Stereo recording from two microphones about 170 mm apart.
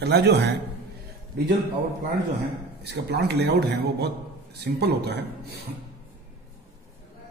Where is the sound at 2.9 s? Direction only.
75° right (ahead or behind).